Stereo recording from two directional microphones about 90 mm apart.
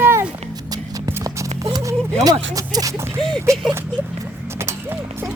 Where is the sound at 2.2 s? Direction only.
45° right (ahead or behind).